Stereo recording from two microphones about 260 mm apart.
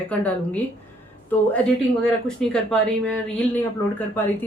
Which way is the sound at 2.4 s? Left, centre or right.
Centre.